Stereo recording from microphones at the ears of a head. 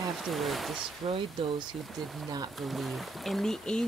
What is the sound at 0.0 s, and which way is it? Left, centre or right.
Speech, right.